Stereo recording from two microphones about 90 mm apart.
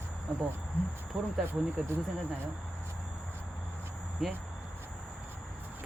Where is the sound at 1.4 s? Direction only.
25° right (ahead or behind).